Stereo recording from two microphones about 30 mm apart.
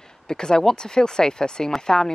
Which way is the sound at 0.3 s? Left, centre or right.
Left.